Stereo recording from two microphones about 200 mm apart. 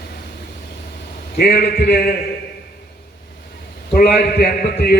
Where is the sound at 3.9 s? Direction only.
50° left (ahead or behind).